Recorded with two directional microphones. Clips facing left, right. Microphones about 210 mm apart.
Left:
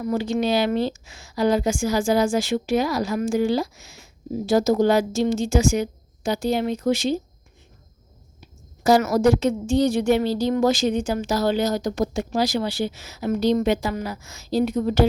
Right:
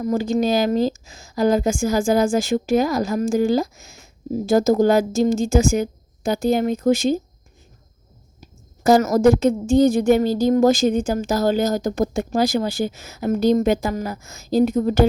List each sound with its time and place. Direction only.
0.0 s a woman's voice: 40° right (ahead or behind)
8.4 s a woman's voice: 45° right (ahead or behind)